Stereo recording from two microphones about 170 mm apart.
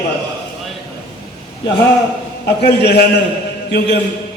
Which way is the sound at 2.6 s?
75° left (ahead or behind).